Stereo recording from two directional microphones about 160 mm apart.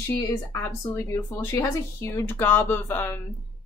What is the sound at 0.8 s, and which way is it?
Speech, 20° left (ahead or behind).